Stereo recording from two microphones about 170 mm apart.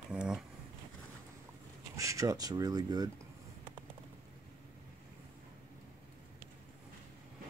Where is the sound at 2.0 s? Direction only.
20° right (ahead or behind).